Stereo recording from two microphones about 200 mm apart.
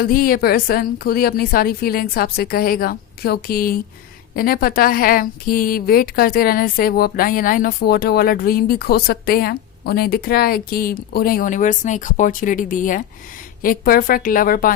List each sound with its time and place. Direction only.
0.0 s a woman's voice: 45° left (ahead or behind)